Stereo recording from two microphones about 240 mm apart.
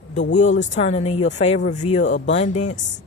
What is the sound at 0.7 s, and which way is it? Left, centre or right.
Speech, left.